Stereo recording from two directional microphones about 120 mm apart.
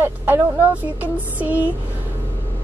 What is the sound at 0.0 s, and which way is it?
A woman's voice, 15° right (ahead or behind).